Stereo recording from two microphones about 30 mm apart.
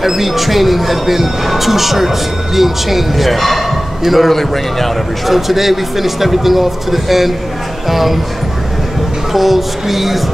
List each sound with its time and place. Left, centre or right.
0.0 s speech: centre
4.3 s a man's voice: centre
5.2 s speech: centre
9.3 s speech: centre